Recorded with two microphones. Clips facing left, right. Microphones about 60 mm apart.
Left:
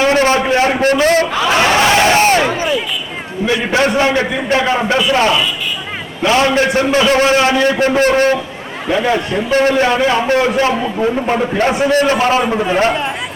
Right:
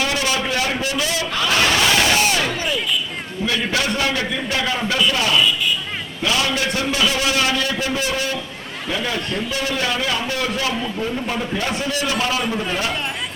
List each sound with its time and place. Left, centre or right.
0.0 s a sound: left
0.8 s a sound: left
1.5 s a sound: left
2.4 s crowd: left
3.4 s a man's voice: left
6.2 s a man's voice: left
8.9 s a man's voice: left
9.5 s a man's voice: left
9.8 s a man's voice: left